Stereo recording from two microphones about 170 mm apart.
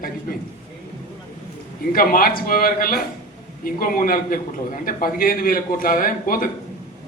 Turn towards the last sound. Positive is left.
turn(degrees=55)  # may be behind; listen again after turning